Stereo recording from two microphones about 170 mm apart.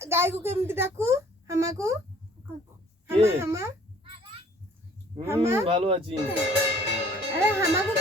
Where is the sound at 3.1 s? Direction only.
35° right (ahead or behind).